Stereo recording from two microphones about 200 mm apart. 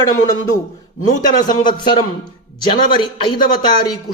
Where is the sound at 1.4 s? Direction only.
20° left (ahead or behind).